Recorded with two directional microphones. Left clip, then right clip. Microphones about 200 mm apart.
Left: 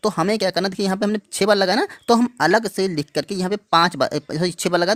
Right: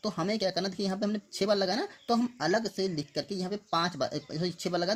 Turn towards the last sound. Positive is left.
turn(degrees=45)  # may be behind; listen again after turning